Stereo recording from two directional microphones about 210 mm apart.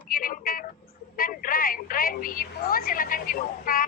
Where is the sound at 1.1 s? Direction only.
40° left (ahead or behind).